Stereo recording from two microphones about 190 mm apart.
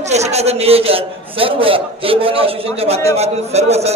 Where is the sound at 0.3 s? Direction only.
35° right (ahead or behind).